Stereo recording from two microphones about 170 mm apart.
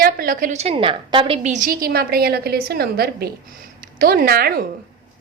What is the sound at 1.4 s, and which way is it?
A woman's voice, 45° right (ahead or behind).